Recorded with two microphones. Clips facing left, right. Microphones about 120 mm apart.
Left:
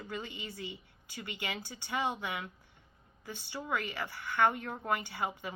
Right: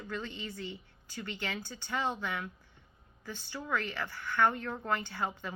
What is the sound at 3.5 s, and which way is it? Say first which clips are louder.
A woman's voice: right 1 dB; 20° left (ahead or behind).